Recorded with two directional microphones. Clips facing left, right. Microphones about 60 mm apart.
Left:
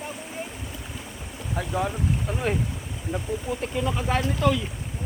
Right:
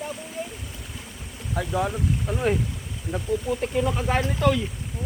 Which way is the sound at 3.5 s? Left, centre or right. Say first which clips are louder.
Right 1 dB; left.